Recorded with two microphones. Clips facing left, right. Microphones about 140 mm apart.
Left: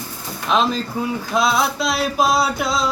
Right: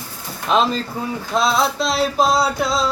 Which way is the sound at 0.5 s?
Centre (ahead or behind).